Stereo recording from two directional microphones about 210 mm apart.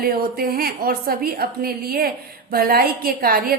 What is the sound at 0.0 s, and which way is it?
A woman's voice, 45° right (ahead or behind).